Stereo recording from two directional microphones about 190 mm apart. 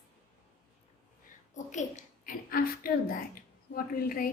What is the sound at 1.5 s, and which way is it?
A woman's voice, 40° left (ahead or behind).